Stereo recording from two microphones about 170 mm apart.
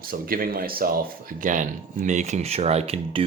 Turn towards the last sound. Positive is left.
turn(degrees=-40)  # may be behind; listen again after turning